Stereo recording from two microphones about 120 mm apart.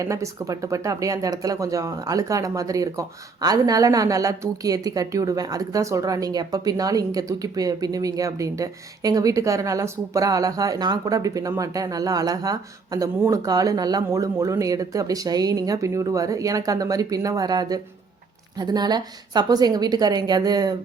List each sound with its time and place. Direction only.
0.0 s a woman's voice: 25° right (ahead or behind)